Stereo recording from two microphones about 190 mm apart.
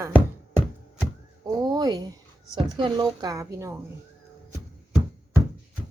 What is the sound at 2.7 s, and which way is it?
A woman's voice, 20° right (ahead or behind).